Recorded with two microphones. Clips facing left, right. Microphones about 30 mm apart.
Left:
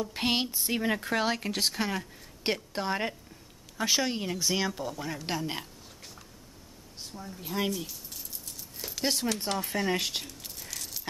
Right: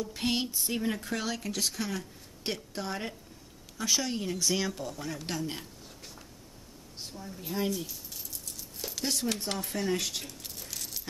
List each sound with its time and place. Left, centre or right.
0.0 s speech: left
7.2 s a woman's voice: centre
7.9 s a sound: centre
9.2 s speech: left
9.6 s speech: left
10.2 s a sound: centre